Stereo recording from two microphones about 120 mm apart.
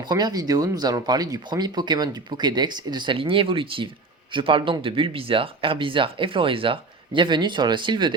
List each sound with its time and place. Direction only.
0.0 s speech: 35° right (ahead or behind)